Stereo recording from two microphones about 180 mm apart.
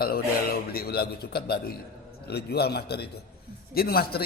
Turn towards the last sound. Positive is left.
turn(degrees=60)  # may be behind; listen again after turning